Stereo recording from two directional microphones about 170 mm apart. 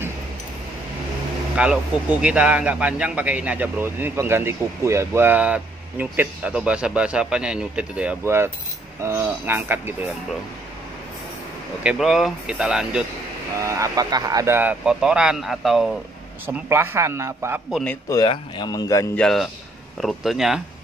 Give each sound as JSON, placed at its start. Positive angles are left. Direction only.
{"t": 1.6, "sound": "speech", "side_deg": -5}
{"t": 11.8, "sound": "speech", "side_deg": -5}
{"t": 13.7, "sound": "speech", "side_deg": -20}
{"t": 16.4, "sound": "speech", "side_deg": -15}
{"t": 17.6, "sound": "speech", "side_deg": 0}
{"t": 18.1, "sound": "speech", "side_deg": 25}
{"t": 19.1, "sound": "speech", "side_deg": 0}